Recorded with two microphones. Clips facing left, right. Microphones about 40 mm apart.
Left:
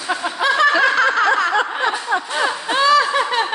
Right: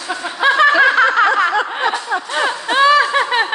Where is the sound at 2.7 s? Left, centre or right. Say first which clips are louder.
Right 3 dB; right.